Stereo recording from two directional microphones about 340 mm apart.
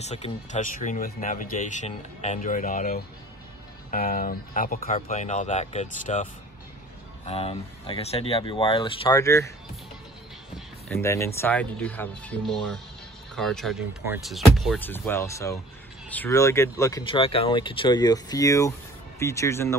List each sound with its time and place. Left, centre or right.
0.0 s speech: centre
7.2 s speech: centre
10.9 s speech: centre